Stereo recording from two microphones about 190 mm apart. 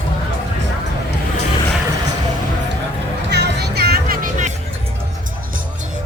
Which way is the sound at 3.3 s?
60° right (ahead or behind).